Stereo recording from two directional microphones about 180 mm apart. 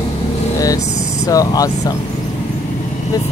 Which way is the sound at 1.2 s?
20° left (ahead or behind).